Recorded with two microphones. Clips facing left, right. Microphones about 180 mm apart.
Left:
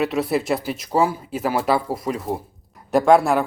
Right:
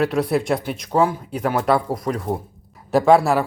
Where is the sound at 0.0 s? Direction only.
Centre (ahead or behind).